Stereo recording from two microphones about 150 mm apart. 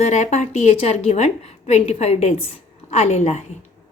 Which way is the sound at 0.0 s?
50° left (ahead or behind).